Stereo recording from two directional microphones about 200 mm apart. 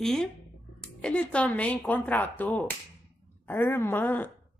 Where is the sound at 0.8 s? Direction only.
5° left (ahead or behind).